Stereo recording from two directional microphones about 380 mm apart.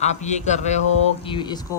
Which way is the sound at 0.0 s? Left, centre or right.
Centre.